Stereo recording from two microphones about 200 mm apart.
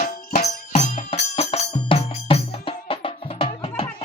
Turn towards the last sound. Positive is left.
turn(degrees=25)  # may be behind; listen again after turning